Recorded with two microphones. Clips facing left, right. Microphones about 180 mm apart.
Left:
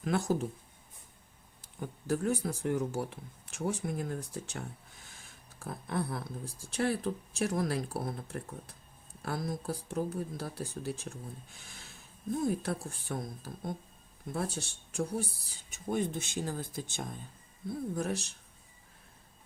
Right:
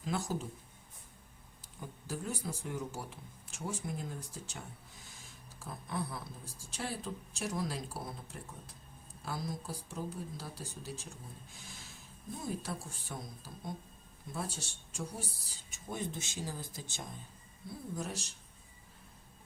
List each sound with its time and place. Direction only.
0.0 s speech: 60° left (ahead or behind)
1.8 s speech: 60° left (ahead or behind)
12.4 s speech: 60° left (ahead or behind)